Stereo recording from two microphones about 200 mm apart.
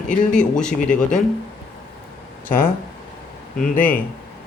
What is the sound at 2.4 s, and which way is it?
Speech, 45° left (ahead or behind).